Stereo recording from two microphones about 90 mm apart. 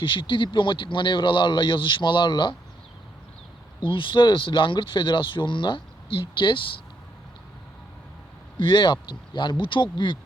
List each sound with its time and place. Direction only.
0.0 s speech: 65° left (ahead or behind)
3.8 s speech: 65° left (ahead or behind)
8.5 s speech: 65° left (ahead or behind)